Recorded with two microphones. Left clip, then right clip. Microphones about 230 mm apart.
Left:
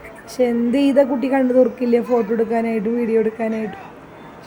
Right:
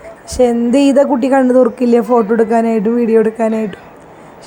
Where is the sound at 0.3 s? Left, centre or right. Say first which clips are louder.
Right 7 dB; centre.